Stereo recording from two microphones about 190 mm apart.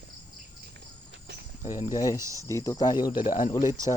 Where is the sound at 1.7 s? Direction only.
20° left (ahead or behind).